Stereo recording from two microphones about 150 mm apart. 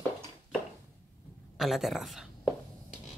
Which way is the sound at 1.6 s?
Centre (ahead or behind).